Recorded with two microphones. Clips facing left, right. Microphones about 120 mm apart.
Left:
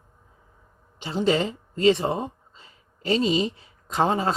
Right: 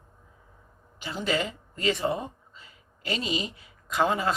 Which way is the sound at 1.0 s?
30° left (ahead or behind).